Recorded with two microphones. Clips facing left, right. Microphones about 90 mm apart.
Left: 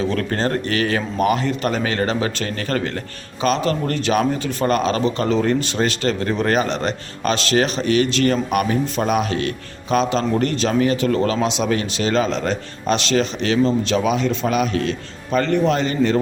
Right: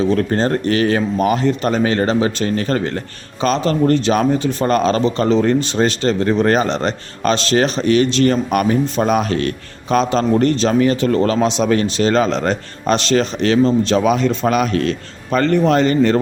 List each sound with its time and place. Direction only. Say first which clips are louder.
0.1 s a man's voice: right 5 dB; 25° right (ahead or behind); by 16.2 s 45° right (ahead or behind)